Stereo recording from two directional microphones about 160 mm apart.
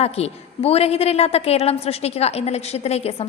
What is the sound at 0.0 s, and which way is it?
A woman's voice, 40° left (ahead or behind).